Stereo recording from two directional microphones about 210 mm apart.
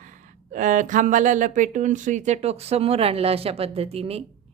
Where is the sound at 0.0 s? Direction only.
40° right (ahead or behind).